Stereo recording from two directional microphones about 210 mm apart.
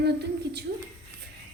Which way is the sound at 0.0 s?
50° right (ahead or behind).